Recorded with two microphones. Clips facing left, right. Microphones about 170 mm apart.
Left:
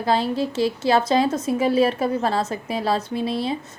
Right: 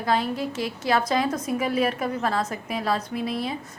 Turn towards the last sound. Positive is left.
turn(degrees=30)  # may be behind; listen again after turning